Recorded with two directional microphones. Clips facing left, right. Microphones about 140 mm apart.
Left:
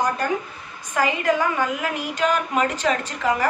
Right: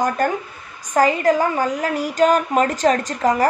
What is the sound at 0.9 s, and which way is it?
A woman's voice, 40° right (ahead or behind).